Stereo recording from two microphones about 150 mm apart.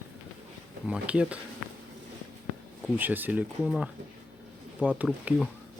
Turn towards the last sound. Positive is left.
turn(degrees=-5)  # may be behind; listen again after turning